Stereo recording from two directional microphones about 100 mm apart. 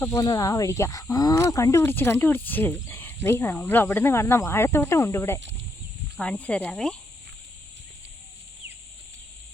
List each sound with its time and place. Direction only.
0.2 s speech: 35° left (ahead or behind)
6.1 s speech: 10° left (ahead or behind)